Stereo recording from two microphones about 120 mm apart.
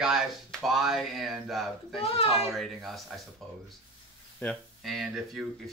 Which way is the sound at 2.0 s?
55° left (ahead or behind).